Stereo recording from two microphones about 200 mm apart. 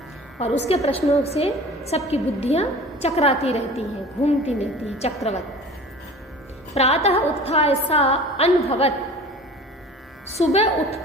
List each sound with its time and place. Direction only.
0.7 s a woman's voice: 30° left (ahead or behind)
6.7 s a woman's voice: 30° left (ahead or behind)
10.3 s a woman's voice: 30° left (ahead or behind)